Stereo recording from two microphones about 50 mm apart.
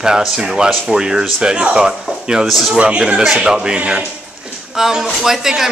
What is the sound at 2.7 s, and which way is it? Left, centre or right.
A man's voice, right.